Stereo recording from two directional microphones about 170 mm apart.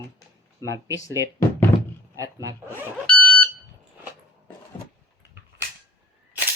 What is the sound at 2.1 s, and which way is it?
Speech, 20° right (ahead or behind).